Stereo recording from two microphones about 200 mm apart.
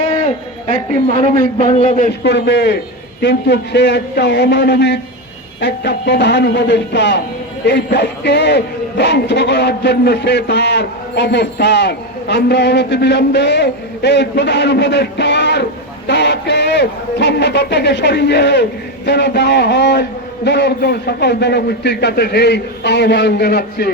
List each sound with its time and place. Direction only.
1.7 s a man's voice: 35° left (ahead or behind)
2.2 s a man's voice: 60° left (ahead or behind)